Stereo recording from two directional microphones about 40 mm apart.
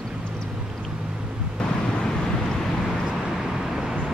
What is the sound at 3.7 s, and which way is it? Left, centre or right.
Vehicle, centre.